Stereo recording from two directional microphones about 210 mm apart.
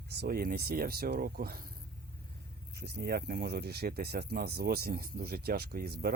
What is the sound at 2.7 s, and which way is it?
Speech, 50° right (ahead or behind).